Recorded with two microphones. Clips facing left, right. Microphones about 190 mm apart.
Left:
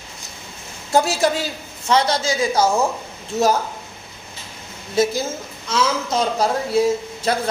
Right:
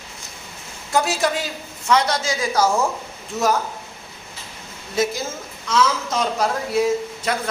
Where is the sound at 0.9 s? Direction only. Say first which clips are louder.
Left 3 dB; 30° left (ahead or behind).